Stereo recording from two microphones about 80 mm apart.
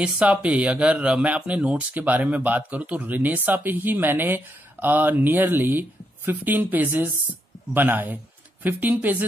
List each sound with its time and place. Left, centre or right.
0.0 s speech: centre